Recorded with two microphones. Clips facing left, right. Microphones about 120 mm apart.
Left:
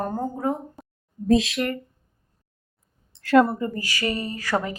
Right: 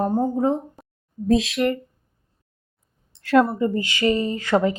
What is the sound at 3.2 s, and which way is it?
Speech, centre (ahead or behind).